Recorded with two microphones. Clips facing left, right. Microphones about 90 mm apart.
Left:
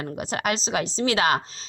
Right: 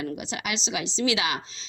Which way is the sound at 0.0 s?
45° left (ahead or behind).